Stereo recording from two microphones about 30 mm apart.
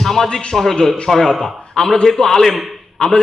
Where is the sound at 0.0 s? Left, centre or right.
Centre.